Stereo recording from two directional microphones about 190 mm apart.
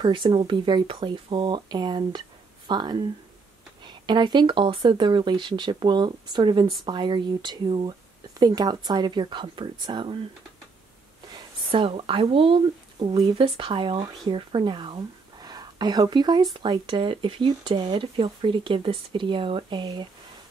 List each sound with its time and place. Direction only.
0.0 s speech: 25° right (ahead or behind)
11.3 s speech: 30° right (ahead or behind)